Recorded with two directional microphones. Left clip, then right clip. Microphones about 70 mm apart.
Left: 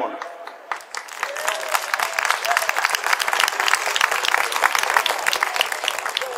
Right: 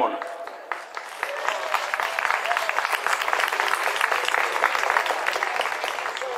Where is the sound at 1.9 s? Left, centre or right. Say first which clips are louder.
Left 4 dB; left.